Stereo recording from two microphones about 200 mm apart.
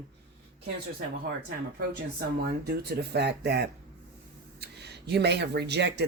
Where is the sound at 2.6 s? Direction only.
50° right (ahead or behind).